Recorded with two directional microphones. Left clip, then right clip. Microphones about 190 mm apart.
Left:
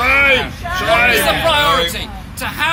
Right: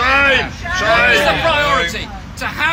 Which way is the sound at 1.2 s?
10° left (ahead or behind).